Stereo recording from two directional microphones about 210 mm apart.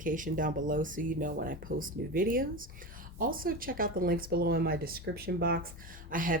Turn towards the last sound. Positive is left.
turn(degrees=-40)  # may be behind; listen again after turning